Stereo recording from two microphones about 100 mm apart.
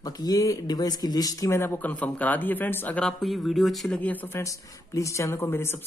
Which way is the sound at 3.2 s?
Centre (ahead or behind).